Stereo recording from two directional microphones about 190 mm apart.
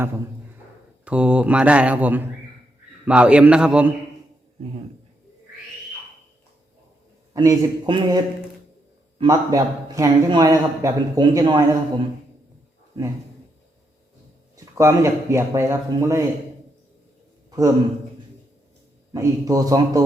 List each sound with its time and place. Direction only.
1.0 s a man's voice: 5° right (ahead or behind)
7.3 s a man's voice: 20° right (ahead or behind)
14.5 s a man's voice: 15° right (ahead or behind)
19.1 s a man's voice: 20° right (ahead or behind)